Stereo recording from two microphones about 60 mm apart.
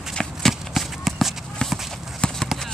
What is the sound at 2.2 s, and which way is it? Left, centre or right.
Clip-clop, centre.